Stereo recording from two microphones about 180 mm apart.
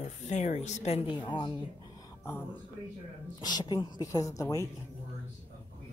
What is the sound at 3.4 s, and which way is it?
A woman's voice, 25° left (ahead or behind).